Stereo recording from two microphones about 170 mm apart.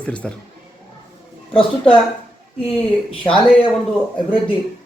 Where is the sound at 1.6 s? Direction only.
30° left (ahead or behind).